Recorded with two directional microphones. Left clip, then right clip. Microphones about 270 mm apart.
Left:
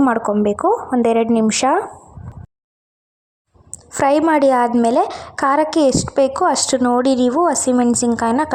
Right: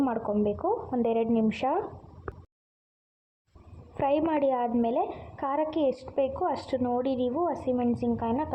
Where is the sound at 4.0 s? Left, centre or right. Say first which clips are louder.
Left 12 dB; left.